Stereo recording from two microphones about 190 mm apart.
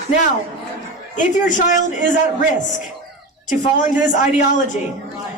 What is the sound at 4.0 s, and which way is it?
Speech, 40° left (ahead or behind).